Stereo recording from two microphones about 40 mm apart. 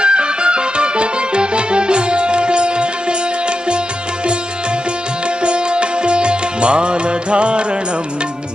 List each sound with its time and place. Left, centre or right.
0.0 s music: right
5.4 s music: right